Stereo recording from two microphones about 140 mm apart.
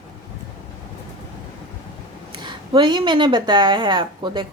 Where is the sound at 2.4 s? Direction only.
35° right (ahead or behind).